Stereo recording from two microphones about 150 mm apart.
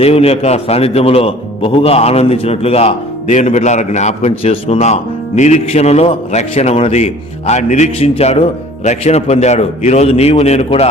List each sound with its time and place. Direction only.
0.0 s a man's voice: 40° left (ahead or behind)